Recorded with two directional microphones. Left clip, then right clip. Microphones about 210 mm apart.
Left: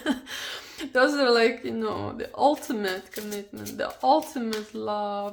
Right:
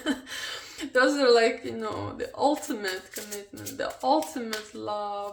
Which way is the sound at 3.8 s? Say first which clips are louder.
Left 3 dB; 40° left (ahead or behind).